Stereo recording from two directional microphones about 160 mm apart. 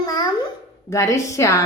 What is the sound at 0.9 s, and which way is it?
Speech, 20° left (ahead or behind).